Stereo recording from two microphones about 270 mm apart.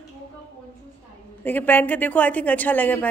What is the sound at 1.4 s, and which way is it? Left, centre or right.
A woman's voice, centre.